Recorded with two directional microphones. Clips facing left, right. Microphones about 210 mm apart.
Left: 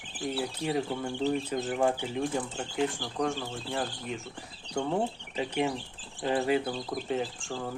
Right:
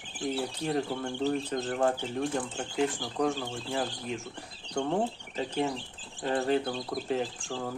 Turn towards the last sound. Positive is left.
turn(degrees=0)  # may be behind; listen again after turning